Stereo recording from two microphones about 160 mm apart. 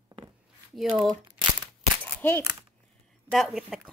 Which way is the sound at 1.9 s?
10° left (ahead or behind).